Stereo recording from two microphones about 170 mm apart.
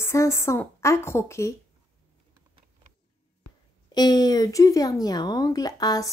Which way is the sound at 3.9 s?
25° left (ahead or behind).